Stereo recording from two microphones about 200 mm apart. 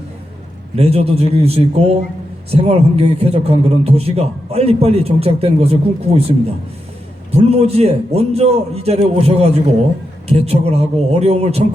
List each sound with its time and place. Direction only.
0.8 s a man's voice: 30° right (ahead or behind)